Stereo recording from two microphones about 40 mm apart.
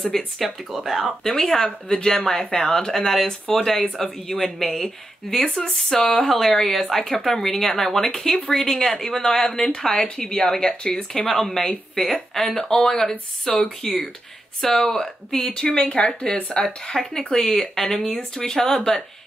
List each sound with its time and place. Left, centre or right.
0.4 s speech: centre
1.2 s speech: centre
5.5 s speech: centre
15.8 s speech: left